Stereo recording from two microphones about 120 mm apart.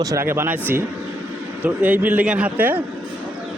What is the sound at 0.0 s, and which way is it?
A man's voice, 25° right (ahead or behind).